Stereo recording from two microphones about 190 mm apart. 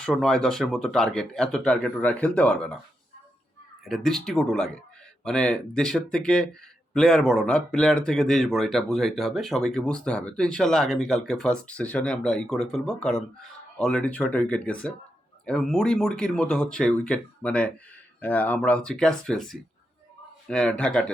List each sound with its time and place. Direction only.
0.0 s speech: 5° left (ahead or behind)
3.8 s speech: centre (ahead or behind)